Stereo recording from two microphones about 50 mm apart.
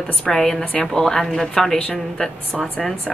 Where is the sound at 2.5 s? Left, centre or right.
Centre.